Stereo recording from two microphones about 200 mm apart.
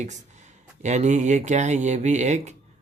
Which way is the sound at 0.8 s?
35° right (ahead or behind).